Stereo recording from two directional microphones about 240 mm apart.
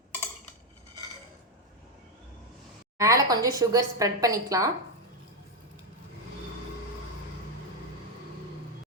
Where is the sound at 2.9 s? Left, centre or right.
Centre.